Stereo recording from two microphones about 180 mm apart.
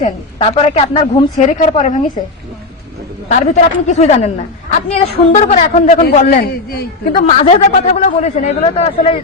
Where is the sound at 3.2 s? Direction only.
40° left (ahead or behind).